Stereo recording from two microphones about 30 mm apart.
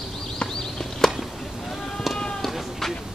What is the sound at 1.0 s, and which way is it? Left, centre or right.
Chop, centre.